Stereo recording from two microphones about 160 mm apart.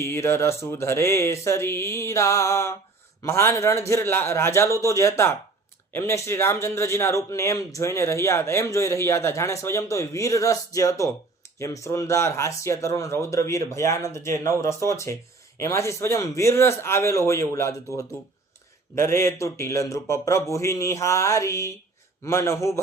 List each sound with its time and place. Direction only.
0.0 s a man's voice: 15° left (ahead or behind)